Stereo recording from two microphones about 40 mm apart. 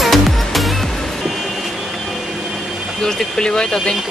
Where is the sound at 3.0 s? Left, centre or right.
Left.